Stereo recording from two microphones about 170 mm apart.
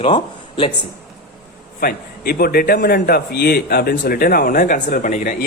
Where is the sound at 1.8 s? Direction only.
60° left (ahead or behind).